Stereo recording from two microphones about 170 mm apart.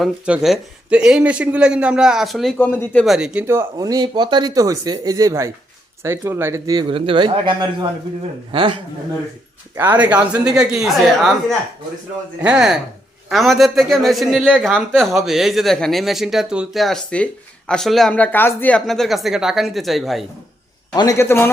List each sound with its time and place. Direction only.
0.0 s speech: 5° right (ahead or behind); by 7.9 s 25° right (ahead or behind)
9.7 s speech: 10° right (ahead or behind)
12.4 s a man's voice: 5° right (ahead or behind)
20.9 s a man's voice: 20° left (ahead or behind)